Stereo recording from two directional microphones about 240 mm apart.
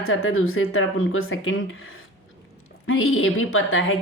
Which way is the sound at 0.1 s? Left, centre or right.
Left.